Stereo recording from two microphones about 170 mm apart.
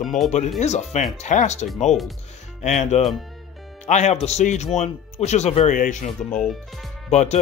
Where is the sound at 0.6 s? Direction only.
40° left (ahead or behind).